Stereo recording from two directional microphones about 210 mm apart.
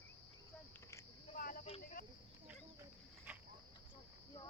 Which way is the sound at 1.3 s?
40° left (ahead or behind).